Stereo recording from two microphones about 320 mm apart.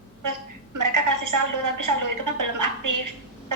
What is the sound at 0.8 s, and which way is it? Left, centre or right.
A woman's voice, right.